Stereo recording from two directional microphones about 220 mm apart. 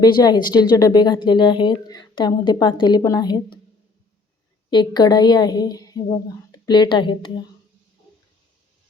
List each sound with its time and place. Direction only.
0.0 s a woman's voice: 20° left (ahead or behind)
4.7 s a woman's voice: 20° left (ahead or behind)